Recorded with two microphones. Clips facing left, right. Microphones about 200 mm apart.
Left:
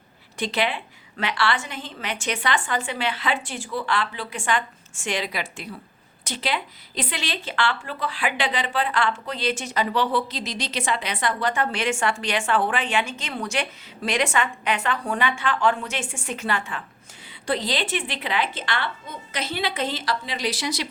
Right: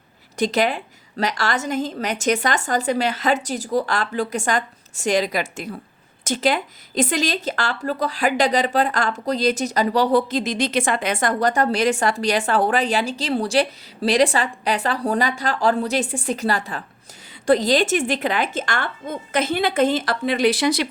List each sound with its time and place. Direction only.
0.3 s a woman's voice: 40° right (ahead or behind); by 20.8 s 60° right (ahead or behind)